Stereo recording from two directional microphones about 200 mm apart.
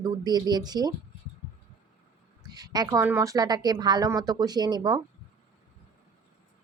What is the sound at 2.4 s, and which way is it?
Speech, 20° right (ahead or behind).